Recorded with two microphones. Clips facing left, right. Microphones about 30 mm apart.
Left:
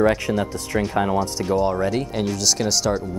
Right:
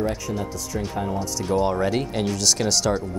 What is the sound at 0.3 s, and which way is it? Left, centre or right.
Speech, left.